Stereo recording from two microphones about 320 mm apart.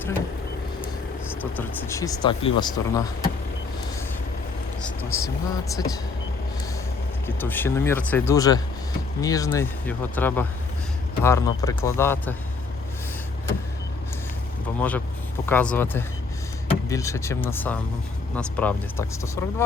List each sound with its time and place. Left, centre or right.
1.3 s speech: centre
4.8 s vehicle: centre
5.7 s speech: centre
7.3 s speech: centre
14.8 s speech: centre